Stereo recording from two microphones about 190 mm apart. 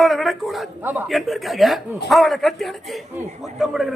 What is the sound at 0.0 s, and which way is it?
A man's voice, centre (ahead or behind).